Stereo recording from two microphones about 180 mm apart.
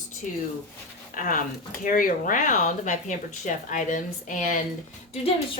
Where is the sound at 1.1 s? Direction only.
50° left (ahead or behind).